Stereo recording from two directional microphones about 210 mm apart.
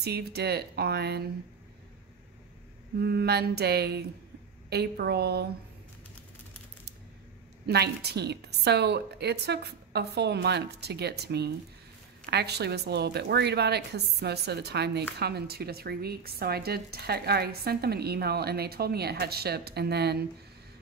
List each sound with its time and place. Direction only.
0.0 s speech: 50° right (ahead or behind)
3.0 s speech: 50° right (ahead or behind)
7.6 s speech: 50° right (ahead or behind)